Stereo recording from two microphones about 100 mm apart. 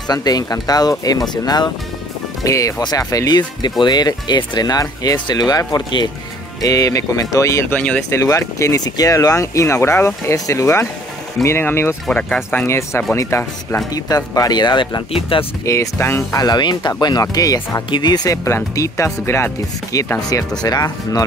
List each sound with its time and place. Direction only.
0.1 s speech: 40° left (ahead or behind)
7.7 s speech: 15° left (ahead or behind)
8.1 s speech: 30° left (ahead or behind)
12.1 s speech: 15° left (ahead or behind)
12.6 s speech: 25° left (ahead or behind)
13.9 s speech: 40° left (ahead or behind)
15.1 s speech: 60° left (ahead or behind)
15.6 s speech: 30° left (ahead or behind)